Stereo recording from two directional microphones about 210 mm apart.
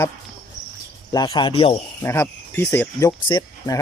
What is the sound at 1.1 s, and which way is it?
Speech, 20° left (ahead or behind).